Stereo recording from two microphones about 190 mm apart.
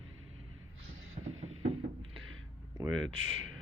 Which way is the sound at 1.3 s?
90° right.